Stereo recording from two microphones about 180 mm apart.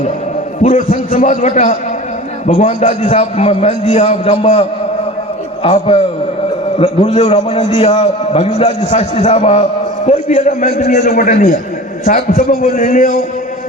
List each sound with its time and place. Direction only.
0.6 s a man's voice: 40° left (ahead or behind)
5.6 s a man's voice: 30° left (ahead or behind); by 13.1 s 50° left (ahead or behind)